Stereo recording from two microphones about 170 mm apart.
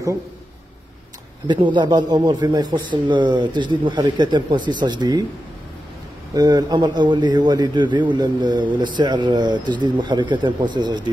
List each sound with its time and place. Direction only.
1.5 s a man's voice: 25° right (ahead or behind)
6.3 s a man's voice: 25° right (ahead or behind)